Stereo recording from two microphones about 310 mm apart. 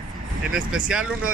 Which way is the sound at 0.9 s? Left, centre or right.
Centre.